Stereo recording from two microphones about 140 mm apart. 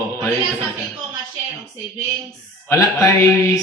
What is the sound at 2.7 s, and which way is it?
Speech, 20° left (ahead or behind).